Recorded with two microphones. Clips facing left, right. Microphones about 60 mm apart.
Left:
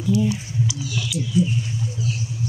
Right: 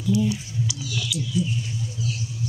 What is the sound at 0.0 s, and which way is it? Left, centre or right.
Speech, left.